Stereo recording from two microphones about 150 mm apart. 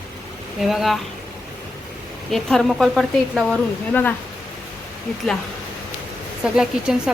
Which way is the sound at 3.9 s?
10° left (ahead or behind).